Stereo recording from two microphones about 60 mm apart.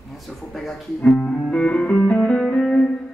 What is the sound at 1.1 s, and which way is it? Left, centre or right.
Music, centre.